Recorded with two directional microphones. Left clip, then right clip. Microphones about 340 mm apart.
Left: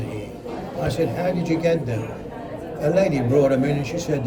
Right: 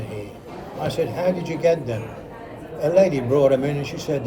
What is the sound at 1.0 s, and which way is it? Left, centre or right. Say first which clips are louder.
A man's voice: right 2 dB; centre.